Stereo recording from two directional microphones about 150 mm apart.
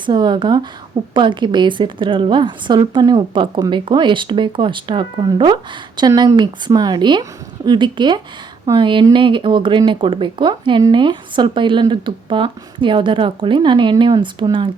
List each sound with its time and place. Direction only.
0.0 s speech: 30° right (ahead or behind)